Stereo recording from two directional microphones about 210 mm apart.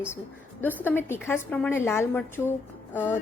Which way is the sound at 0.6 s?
10° left (ahead or behind).